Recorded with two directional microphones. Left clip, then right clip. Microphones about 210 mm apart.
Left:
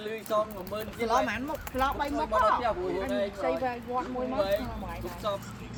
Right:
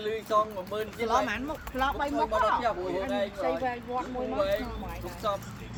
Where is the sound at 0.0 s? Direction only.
25° right (ahead or behind).